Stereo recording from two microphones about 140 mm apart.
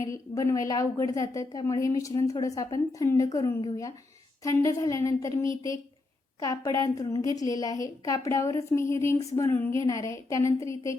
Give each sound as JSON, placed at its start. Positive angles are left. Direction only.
{"t": 0.0, "sound": "a woman's voice", "side_deg": 25}